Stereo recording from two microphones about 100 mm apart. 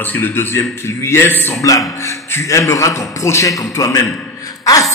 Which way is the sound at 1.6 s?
35° left (ahead or behind).